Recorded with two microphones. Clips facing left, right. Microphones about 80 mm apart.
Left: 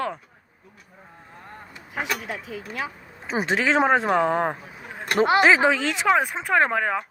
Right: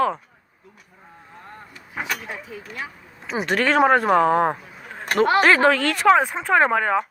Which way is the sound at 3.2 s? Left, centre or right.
Left.